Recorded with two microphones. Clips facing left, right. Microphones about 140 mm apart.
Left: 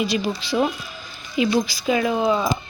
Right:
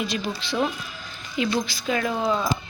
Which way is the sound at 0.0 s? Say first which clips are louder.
Left 5 dB; 5° left (ahead or behind).